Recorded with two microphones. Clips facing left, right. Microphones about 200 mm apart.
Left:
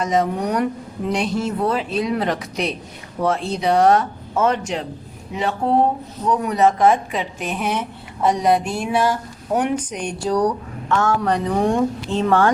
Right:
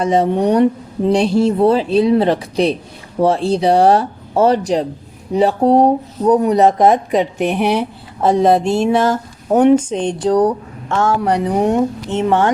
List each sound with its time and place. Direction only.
0.0 s speech: 30° right (ahead or behind)
6.9 s a woman's voice: 60° right (ahead or behind)
7.7 s a woman's voice: 30° right (ahead or behind)
11.3 s a woman's voice: 15° right (ahead or behind)